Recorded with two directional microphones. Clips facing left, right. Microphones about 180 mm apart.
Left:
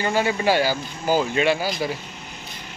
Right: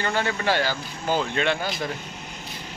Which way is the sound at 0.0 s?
10° left (ahead or behind).